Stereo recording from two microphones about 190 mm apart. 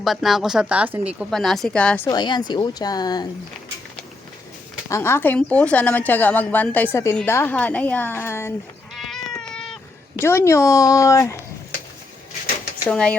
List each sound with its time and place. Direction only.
0.0 s speech: centre (ahead or behind)
2.0 s speech: 20° left (ahead or behind)
4.9 s a woman's voice: 15° left (ahead or behind)
9.0 s cat: centre (ahead or behind)
10.2 s a woman's voice: 15° left (ahead or behind)
12.9 s speech: 5° left (ahead or behind)